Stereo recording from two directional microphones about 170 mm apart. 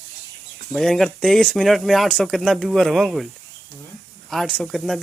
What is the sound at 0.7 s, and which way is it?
Speech, centre (ahead or behind).